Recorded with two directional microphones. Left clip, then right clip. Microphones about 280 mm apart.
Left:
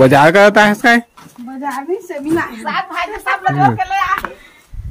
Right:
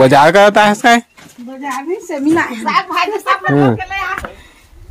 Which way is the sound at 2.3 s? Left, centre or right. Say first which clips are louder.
Right 2 dB; centre.